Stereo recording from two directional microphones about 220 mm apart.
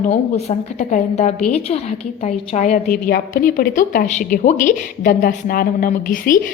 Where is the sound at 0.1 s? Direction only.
30° left (ahead or behind).